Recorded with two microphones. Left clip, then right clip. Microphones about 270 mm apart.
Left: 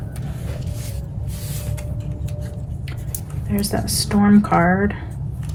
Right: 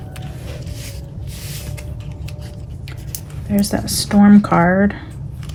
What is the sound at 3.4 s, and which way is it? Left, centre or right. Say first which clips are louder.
Speech: right 3 dB; right.